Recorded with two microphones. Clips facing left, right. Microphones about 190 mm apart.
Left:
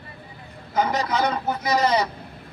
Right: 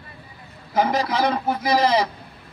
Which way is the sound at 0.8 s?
30° right (ahead or behind).